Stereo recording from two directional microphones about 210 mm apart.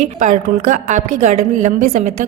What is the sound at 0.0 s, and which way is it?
A woman's voice, 35° right (ahead or behind).